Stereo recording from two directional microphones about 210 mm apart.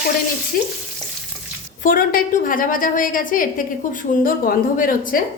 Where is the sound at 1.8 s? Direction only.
40° left (ahead or behind).